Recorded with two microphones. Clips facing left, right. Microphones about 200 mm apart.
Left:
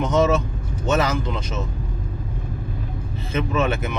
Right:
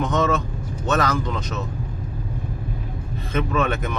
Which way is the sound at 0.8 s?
10° left (ahead or behind).